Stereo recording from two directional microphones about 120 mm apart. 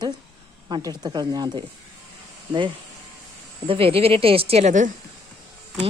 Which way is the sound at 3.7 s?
50° right (ahead or behind).